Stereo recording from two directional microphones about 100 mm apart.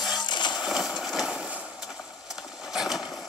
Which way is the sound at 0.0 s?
45° left (ahead or behind).